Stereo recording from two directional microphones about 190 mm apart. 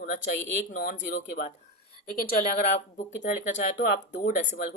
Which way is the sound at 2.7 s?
40° left (ahead or behind).